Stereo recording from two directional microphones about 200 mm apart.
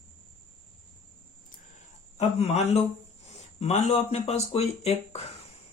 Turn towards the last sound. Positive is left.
turn(degrees=30)  # may be behind; listen again after turning